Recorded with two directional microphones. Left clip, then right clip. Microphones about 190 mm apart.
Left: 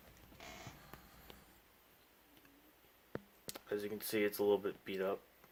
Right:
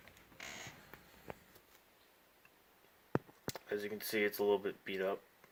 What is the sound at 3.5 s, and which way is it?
Speech, 5° left (ahead or behind).